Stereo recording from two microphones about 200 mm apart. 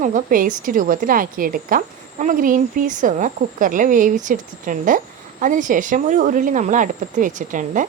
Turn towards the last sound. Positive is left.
turn(degrees=-40)  # may be behind; listen again after turning